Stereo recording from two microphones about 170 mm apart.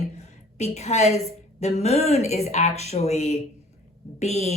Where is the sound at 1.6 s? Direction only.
40° left (ahead or behind).